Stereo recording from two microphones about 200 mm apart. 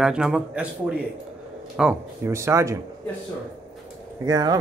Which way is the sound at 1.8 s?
10° right (ahead or behind).